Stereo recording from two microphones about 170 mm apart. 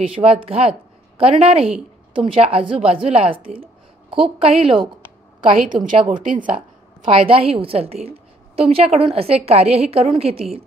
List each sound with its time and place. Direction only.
0.0 s a woman's voice: 35° right (ahead or behind)
6.1 s speech: 55° right (ahead or behind)
7.1 s a woman's voice: 30° right (ahead or behind)